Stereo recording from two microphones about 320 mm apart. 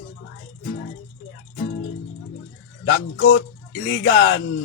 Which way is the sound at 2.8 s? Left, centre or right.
Left.